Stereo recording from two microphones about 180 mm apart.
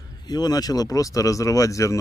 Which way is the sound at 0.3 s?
20° left (ahead or behind).